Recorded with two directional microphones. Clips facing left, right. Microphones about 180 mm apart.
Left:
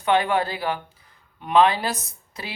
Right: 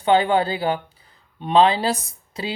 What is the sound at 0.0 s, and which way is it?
Speech, 30° right (ahead or behind).